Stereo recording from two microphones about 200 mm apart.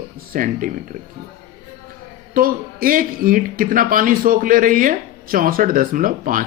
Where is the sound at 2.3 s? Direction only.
45° right (ahead or behind).